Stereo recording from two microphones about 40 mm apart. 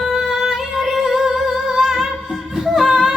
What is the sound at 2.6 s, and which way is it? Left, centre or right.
Music, centre.